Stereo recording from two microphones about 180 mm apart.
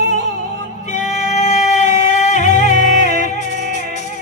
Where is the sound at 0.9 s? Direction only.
40° left (ahead or behind).